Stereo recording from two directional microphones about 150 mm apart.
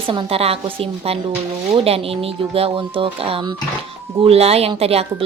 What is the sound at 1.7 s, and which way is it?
A woman's voice, 40° right (ahead or behind).